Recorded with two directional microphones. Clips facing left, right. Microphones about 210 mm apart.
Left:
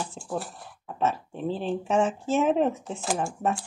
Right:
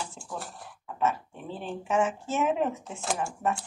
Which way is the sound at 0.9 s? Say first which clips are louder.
Left 1 dB; 30° left (ahead or behind).